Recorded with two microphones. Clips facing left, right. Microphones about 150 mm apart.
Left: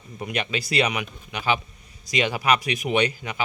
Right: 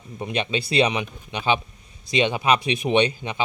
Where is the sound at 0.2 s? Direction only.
25° right (ahead or behind).